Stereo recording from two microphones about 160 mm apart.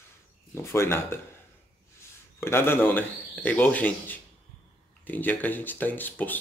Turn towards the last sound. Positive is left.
turn(degrees=10)  # may be behind; listen again after turning